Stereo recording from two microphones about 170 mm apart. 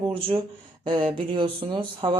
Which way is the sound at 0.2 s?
30° right (ahead or behind).